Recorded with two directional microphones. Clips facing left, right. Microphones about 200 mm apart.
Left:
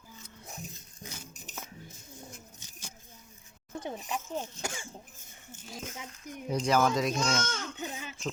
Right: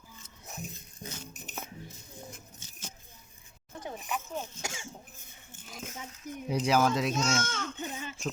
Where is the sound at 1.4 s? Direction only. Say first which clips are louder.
Right 3 dB; 60° right (ahead or behind).